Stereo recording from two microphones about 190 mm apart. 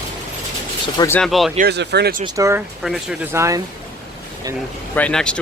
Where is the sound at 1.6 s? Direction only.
60° right (ahead or behind).